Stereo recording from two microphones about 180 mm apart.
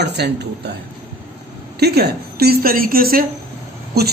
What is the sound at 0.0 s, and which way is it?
Speech, 70° right (ahead or behind).